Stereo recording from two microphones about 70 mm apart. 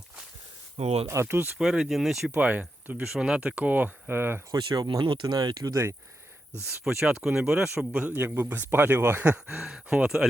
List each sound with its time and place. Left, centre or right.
1.0 s speech: right
1.5 s speech: centre
2.3 s speech: centre
3.1 s speech: centre; by 4.4 s right
4.5 s speech: right
6.8 s speech: centre
7.8 s speech: centre
8.1 s speech: right
9.2 s speech: centre
9.6 s speech: centre